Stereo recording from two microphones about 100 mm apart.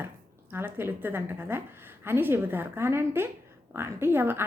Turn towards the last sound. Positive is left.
turn(degrees=-20)  # may be behind; listen again after turning